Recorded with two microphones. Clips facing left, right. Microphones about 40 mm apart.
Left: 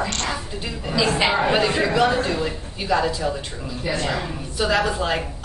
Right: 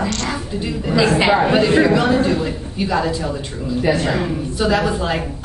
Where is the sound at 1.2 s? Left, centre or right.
Centre.